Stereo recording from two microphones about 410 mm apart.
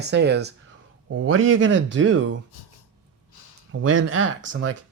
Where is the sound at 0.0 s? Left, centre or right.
Right.